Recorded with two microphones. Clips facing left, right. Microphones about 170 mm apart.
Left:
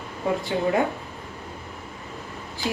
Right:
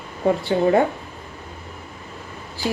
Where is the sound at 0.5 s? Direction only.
40° right (ahead or behind).